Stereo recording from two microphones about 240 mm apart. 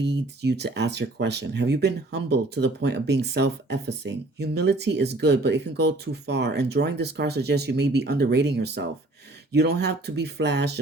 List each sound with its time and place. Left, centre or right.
0.0 s speech: right